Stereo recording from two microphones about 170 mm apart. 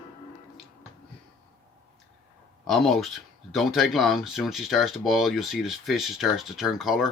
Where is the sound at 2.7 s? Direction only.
Centre (ahead or behind).